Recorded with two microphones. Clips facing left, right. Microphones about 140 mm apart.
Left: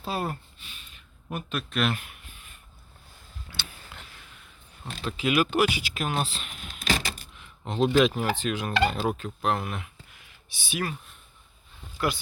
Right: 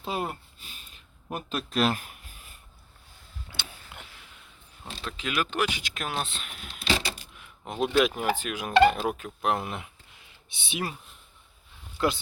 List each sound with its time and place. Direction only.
0.0 s speech: 15° right (ahead or behind)
1.3 s speech: 30° right (ahead or behind)
3.5 s vehicle: 20° right (ahead or behind)
5.0 s speech: 5° left (ahead or behind)
6.7 s vehicle: 45° left (ahead or behind)
7.6 s speech: 10° right (ahead or behind); by 10.9 s 25° right (ahead or behind)
11.9 s speech: 20° right (ahead or behind)